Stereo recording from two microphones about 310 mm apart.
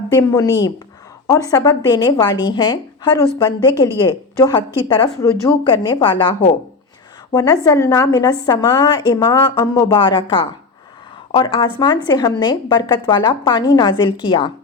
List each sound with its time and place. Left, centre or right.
0.1 s a woman's voice: centre